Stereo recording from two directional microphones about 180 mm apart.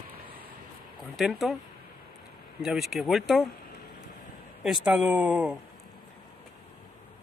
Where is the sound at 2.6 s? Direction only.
Centre (ahead or behind).